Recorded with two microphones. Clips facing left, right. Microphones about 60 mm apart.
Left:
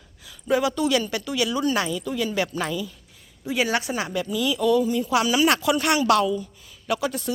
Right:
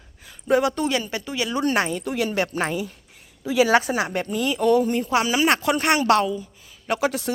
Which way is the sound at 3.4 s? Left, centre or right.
Right.